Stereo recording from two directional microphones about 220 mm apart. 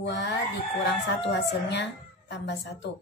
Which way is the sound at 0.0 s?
50° left (ahead or behind).